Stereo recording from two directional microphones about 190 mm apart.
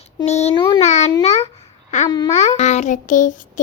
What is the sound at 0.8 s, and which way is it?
Child singing, 35° left (ahead or behind).